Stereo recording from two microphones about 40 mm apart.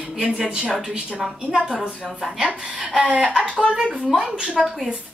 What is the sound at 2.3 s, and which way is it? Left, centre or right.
Speech, centre.